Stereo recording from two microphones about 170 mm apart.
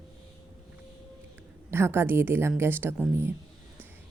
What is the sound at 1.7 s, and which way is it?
A woman's voice, 15° right (ahead or behind).